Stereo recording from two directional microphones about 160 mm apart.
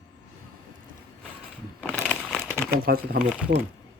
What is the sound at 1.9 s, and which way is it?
Crumpling, 5° left (ahead or behind).